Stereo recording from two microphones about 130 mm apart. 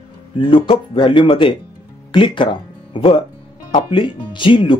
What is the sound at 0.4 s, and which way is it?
Speech, 40° left (ahead or behind).